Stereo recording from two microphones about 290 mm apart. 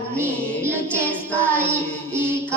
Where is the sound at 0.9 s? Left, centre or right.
Centre.